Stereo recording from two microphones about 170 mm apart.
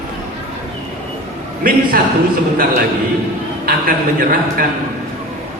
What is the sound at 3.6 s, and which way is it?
A man's voice, 55° right (ahead or behind).